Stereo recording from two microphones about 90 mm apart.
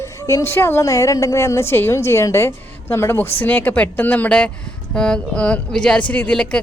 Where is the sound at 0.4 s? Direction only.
25° left (ahead or behind).